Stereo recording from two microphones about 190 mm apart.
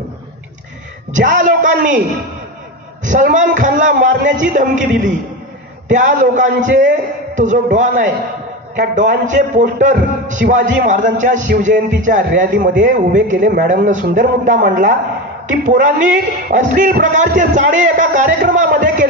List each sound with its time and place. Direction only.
1.1 s a man's voice: 40° right (ahead or behind)
3.0 s a man's voice: 40° right (ahead or behind)